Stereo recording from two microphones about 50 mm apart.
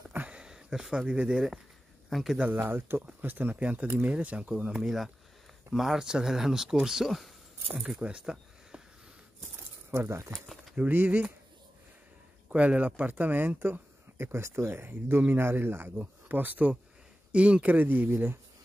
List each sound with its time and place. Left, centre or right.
0.3 s a sound: centre
2.0 s speech: centre
2.5 s speech: right
4.8 s speech: centre
8.0 s a sound: centre
9.9 s speech: right
11.1 s speech: right
12.4 s speech: right
14.1 s speech: right
14.9 s speech: right
16.0 s speech: right
17.3 s speech: right
17.7 s speech: right